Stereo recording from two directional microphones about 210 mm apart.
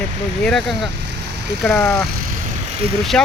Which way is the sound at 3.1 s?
5° left (ahead or behind).